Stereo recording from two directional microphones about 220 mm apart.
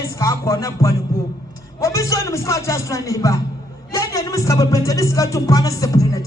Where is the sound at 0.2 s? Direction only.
15° left (ahead or behind).